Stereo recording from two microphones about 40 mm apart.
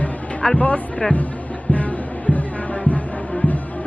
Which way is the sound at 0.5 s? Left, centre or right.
Left.